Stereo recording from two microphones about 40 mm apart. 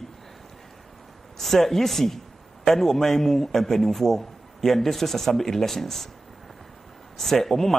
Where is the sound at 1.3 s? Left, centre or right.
Centre.